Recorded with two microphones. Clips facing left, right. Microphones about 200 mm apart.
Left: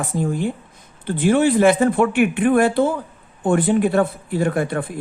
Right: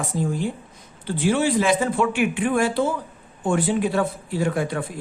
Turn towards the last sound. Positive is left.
turn(degrees=55)  # may be behind; listen again after turning